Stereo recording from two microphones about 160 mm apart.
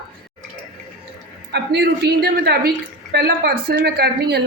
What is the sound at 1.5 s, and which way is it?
A woman's voice, 90° right.